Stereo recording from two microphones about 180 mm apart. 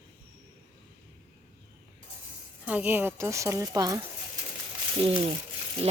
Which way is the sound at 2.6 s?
10° right (ahead or behind).